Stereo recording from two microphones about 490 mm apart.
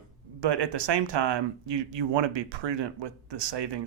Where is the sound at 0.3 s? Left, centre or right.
Right.